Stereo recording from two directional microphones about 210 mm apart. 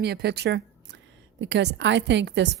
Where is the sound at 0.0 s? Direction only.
50° right (ahead or behind).